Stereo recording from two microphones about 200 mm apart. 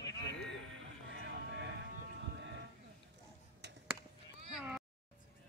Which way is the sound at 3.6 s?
60° right (ahead or behind).